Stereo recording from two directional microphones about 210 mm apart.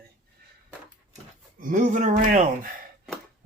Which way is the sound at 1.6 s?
40° right (ahead or behind).